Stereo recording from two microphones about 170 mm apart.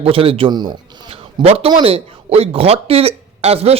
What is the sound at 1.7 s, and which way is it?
Speech, 30° right (ahead or behind).